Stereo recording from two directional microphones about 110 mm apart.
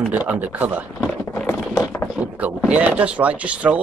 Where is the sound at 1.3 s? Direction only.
10° left (ahead or behind).